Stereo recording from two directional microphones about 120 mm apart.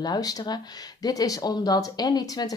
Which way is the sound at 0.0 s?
35° left (ahead or behind).